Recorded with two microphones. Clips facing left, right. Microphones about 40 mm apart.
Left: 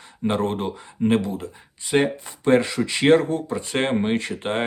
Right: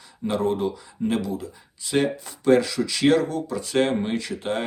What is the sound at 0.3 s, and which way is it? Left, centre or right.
Speech, left.